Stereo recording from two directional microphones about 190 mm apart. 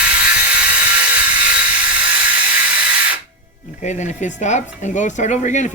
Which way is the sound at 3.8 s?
40° left (ahead or behind).